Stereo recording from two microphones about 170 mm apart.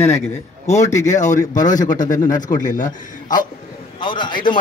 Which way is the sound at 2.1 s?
20° left (ahead or behind).